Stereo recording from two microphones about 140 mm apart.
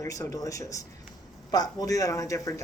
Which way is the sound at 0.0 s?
25° left (ahead or behind).